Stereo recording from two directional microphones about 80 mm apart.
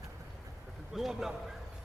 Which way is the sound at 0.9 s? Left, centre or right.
Centre.